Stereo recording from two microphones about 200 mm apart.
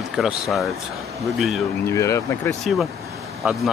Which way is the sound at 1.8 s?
15° left (ahead or behind).